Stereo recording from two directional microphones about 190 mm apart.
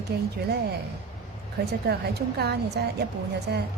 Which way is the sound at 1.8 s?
60° right (ahead or behind).